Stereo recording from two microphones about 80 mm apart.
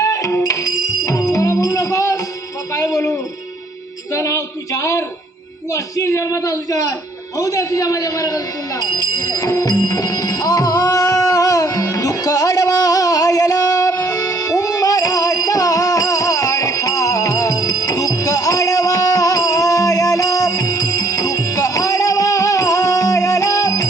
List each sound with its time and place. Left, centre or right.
0.0 s music: left
2.7 s a sound: left
5.7 s a man's voice: left
8.8 s music: left